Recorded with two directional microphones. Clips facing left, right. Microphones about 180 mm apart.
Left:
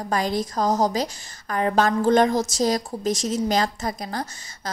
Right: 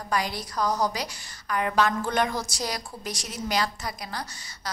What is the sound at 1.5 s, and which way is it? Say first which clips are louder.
A woman's voice: left 4 dB; 35° left (ahead or behind).